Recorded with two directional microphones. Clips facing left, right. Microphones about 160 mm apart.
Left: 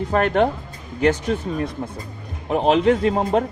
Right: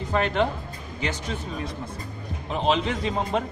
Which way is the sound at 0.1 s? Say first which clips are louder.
Left 5 dB; 50° left (ahead or behind).